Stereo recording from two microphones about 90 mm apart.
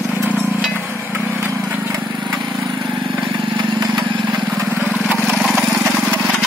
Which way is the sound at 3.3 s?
60° right (ahead or behind).